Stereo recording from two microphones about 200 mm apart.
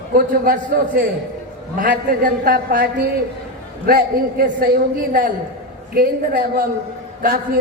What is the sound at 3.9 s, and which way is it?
Speech, 50° right (ahead or behind).